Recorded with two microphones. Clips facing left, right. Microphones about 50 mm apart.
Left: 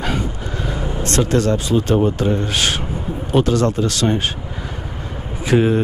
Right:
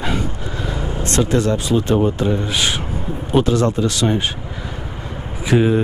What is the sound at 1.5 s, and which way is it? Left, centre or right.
Speech, left.